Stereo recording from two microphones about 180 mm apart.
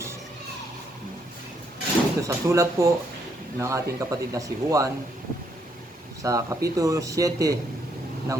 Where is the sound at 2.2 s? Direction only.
15° right (ahead or behind).